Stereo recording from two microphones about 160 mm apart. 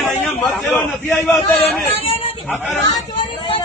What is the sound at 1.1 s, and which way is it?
Speech, 15° left (ahead or behind).